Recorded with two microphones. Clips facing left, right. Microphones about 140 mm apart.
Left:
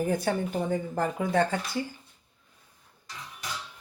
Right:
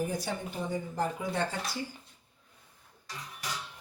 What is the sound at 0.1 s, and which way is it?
Speech, 55° left (ahead or behind).